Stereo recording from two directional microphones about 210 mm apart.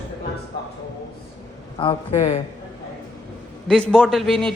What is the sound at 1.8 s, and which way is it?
Speech, 25° left (ahead or behind).